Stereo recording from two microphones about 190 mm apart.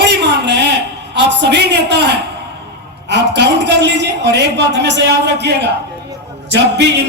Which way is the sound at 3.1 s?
65° right (ahead or behind).